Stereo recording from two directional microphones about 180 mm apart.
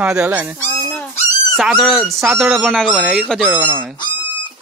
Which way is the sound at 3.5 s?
10° right (ahead or behind).